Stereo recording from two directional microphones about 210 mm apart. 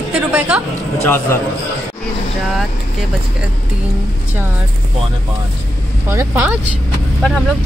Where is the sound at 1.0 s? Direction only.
10° left (ahead or behind).